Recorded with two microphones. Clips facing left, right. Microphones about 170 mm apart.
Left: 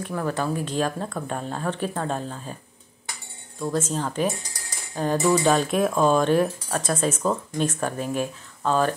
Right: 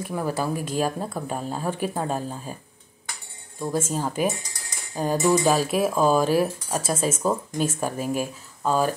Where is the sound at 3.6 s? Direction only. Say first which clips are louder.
Even; 10° right (ahead or behind).